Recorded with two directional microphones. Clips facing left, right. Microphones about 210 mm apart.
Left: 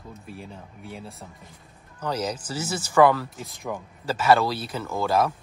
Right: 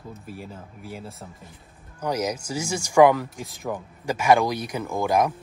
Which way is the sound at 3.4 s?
Centre (ahead or behind).